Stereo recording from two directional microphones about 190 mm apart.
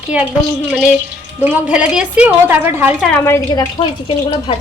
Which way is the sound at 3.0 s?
5° left (ahead or behind).